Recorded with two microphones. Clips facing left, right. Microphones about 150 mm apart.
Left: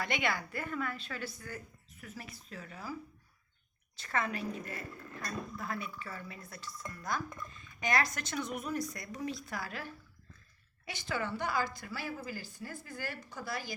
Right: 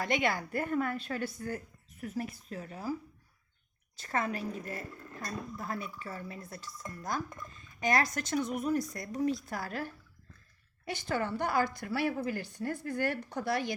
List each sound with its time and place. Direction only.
0.0 s a woman's voice: 40° right (ahead or behind)
3.9 s a woman's voice: 40° right (ahead or behind); by 13.7 s 65° right (ahead or behind)